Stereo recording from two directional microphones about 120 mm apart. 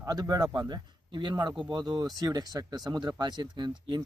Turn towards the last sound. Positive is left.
turn(degrees=-40)  # may be behind; listen again after turning